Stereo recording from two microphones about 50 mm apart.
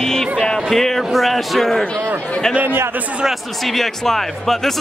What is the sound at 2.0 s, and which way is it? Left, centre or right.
Speech, right.